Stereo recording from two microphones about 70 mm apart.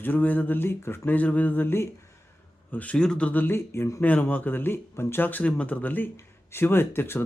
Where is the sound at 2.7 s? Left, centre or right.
Left.